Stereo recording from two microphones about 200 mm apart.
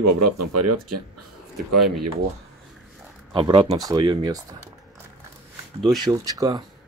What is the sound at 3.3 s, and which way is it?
Speech, 25° right (ahead or behind).